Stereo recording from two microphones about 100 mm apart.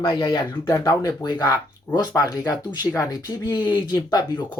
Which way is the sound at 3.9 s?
45° left (ahead or behind).